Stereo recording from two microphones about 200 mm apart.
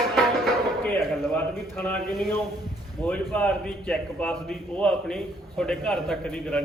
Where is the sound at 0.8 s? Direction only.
10° left (ahead or behind).